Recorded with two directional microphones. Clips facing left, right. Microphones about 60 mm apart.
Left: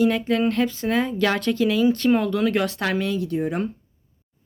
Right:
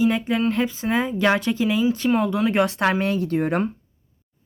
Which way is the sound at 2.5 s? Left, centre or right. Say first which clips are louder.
Right 3 dB; right.